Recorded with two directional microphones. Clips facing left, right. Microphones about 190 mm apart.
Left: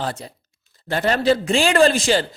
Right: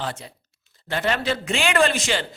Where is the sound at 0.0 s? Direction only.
40° left (ahead or behind).